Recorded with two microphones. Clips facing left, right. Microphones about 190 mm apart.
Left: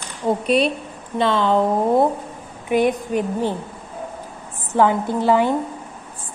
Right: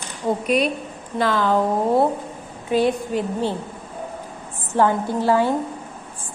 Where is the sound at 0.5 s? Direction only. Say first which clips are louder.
Left 2 dB; 30° left (ahead or behind).